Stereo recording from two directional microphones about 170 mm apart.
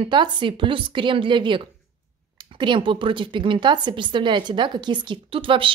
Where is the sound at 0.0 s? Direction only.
30° right (ahead or behind).